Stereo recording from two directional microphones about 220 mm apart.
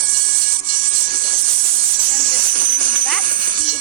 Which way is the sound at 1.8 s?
40° right (ahead or behind).